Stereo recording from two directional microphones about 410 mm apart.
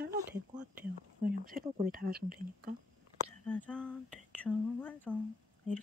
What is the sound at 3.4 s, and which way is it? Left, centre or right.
Speech, centre.